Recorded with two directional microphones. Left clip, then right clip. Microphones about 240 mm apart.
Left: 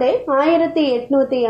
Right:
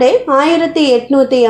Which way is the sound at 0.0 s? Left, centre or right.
Right.